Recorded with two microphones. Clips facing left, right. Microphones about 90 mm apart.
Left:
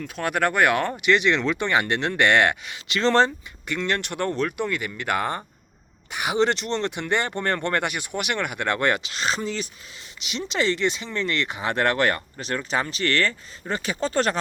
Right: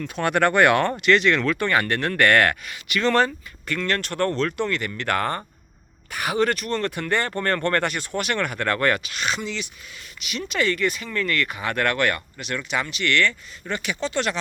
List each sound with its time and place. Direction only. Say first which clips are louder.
0.0 s speech: right 3 dB; 5° left (ahead or behind); by 9.6 s 40° left (ahead or behind)
10.2 s speech: even; 25° left (ahead or behind)